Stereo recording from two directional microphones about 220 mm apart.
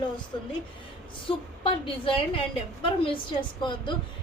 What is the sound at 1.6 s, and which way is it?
Speech, 25° left (ahead or behind).